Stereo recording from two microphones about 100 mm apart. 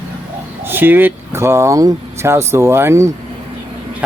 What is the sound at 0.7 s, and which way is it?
Speech, 20° right (ahead or behind).